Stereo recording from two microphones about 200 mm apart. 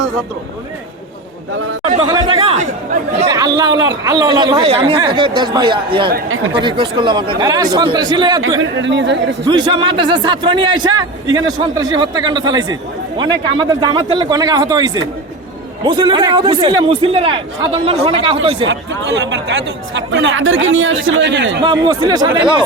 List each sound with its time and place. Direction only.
2.0 s chatter: 20° right (ahead or behind)
3.2 s a man's voice: 20° right (ahead or behind)
8.5 s speech: 65° right (ahead or behind)
9.5 s a man's voice: 25° right (ahead or behind)
18.7 s speech: 60° right (ahead or behind)
21.6 s a man's voice: 25° right (ahead or behind)